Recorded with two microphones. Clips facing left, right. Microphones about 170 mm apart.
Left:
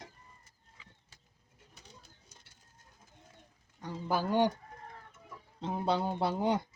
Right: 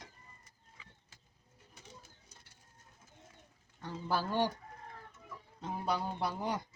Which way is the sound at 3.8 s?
15° left (ahead or behind).